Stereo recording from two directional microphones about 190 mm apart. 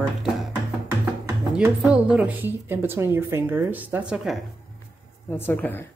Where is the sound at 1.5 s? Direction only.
5° right (ahead or behind).